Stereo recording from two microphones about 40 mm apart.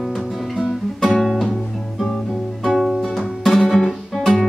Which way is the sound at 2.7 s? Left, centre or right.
Centre.